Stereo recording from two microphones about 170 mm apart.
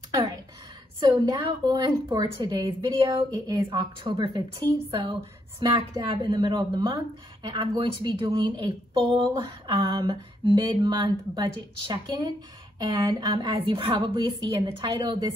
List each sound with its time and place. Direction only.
0.9 s a woman's voice: 25° right (ahead or behind)